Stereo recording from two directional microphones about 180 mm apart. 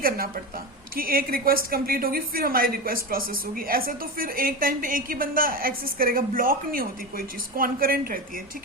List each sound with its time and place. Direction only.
0.9 s a woman's voice: 55° right (ahead or behind)